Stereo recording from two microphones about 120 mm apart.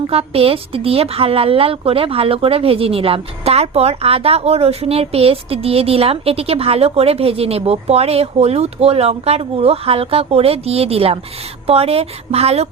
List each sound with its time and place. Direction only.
0.1 s a woman's voice: 55° right (ahead or behind)